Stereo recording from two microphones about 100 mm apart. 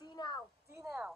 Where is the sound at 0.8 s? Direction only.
25° right (ahead or behind).